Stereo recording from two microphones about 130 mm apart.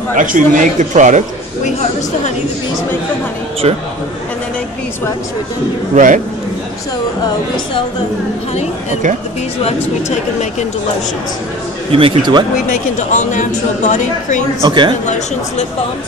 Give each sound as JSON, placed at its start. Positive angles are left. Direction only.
{"t": 0.1, "sound": "speech", "side_deg": -90}
{"t": 3.6, "sound": "a man's voice", "side_deg": -45}
{"t": 5.9, "sound": "a man's voice", "side_deg": -90}
{"t": 9.6, "sound": "speech", "side_deg": 50}
{"t": 11.9, "sound": "speech", "side_deg": -40}
{"t": 12.6, "sound": "a woman's voice", "side_deg": 75}
{"t": 14.6, "sound": "speech", "side_deg": -40}